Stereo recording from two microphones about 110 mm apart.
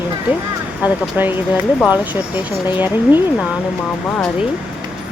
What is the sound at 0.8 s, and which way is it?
Speech, 15° right (ahead or behind).